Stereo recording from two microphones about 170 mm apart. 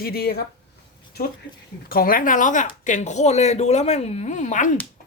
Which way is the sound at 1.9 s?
60° left (ahead or behind).